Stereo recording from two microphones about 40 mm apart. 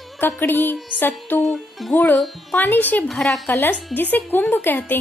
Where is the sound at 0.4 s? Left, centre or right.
Left.